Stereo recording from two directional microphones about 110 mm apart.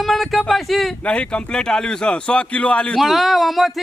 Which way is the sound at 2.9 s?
Centre (ahead or behind).